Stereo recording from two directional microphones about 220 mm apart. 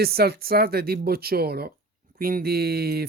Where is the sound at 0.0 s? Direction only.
45° right (ahead or behind).